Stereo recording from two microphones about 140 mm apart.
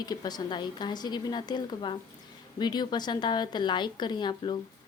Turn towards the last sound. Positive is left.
turn(degrees=35)  # may be behind; listen again after turning